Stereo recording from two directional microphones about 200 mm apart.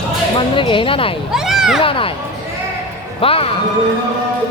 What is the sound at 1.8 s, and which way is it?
Speech, 25° left (ahead or behind).